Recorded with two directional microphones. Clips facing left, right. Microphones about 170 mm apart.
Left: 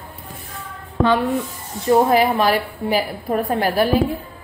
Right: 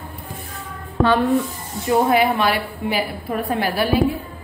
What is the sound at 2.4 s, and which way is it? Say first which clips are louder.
A woman's voice: left 2 dB; 40° left (ahead or behind).